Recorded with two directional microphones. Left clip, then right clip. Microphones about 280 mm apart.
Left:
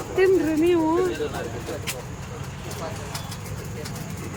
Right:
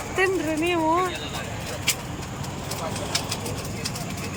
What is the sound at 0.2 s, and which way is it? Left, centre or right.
Speech, centre.